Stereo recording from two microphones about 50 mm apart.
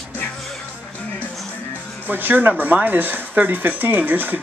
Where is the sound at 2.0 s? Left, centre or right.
Right.